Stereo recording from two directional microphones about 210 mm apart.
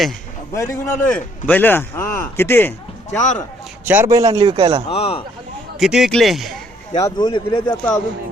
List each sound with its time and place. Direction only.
0.5 s a man's voice: 15° left (ahead or behind)
3.8 s a man's voice: 10° right (ahead or behind)
4.9 s speech: 30° left (ahead or behind)
5.8 s speech: centre (ahead or behind)
7.0 s speech: 20° left (ahead or behind)